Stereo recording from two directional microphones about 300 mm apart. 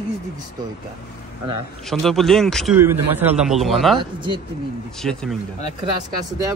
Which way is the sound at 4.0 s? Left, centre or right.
Centre.